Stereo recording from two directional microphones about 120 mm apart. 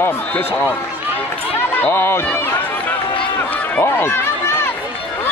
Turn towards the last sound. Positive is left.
turn(degrees=20)  # may be behind; listen again after turning